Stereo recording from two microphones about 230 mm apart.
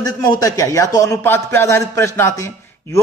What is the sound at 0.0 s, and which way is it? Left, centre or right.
A man's voice, centre.